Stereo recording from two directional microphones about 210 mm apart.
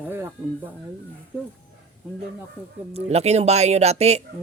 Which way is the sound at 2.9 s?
30° right (ahead or behind).